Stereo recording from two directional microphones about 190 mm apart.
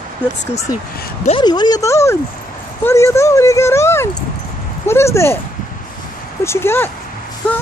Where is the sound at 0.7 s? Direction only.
20° left (ahead or behind).